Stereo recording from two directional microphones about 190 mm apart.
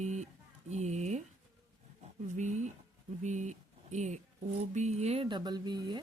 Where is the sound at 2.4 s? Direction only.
40° right (ahead or behind); by 6.0 s 20° right (ahead or behind).